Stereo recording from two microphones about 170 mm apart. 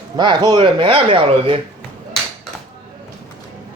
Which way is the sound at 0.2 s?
25° right (ahead or behind).